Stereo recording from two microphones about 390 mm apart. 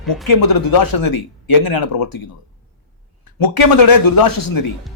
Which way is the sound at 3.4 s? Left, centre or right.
Left.